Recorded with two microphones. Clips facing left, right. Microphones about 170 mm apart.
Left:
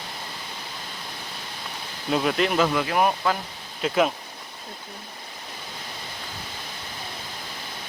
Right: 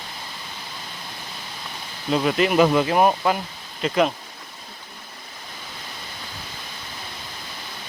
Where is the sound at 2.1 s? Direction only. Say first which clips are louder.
Right 3 dB; centre (ahead or behind).